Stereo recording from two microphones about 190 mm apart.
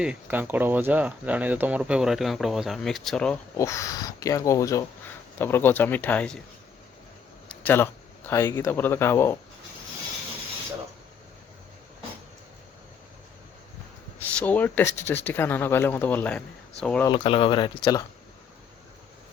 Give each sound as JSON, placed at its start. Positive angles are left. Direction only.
{"t": 0.0, "sound": "speech", "side_deg": -10}
{"t": 3.6, "sound": "speech", "side_deg": 15}
{"t": 7.4, "sound": "a sound", "side_deg": 10}
{"t": 8.3, "sound": "speech", "side_deg": 15}
{"t": 14.3, "sound": "speech", "side_deg": 10}
{"t": 17.1, "sound": "speech", "side_deg": 30}